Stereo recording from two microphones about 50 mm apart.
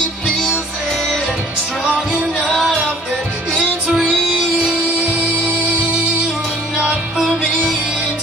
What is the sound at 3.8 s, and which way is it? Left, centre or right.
Music, centre.